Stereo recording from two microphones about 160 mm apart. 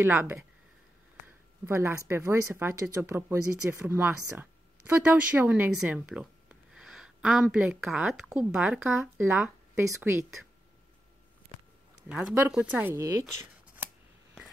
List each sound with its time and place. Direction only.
0.0 s speech: 15° right (ahead or behind)
12.1 s speech: 5° right (ahead or behind)